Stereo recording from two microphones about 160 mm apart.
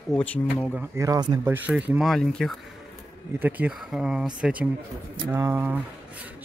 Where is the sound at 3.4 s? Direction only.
10° right (ahead or behind).